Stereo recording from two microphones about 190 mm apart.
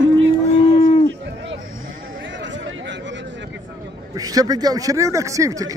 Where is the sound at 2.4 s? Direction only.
70° right (ahead or behind).